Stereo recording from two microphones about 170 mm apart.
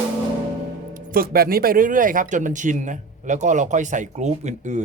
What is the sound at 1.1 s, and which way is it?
Speech, 60° right (ahead or behind).